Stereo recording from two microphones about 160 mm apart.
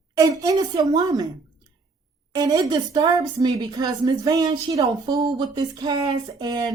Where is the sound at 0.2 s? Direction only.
20° right (ahead or behind).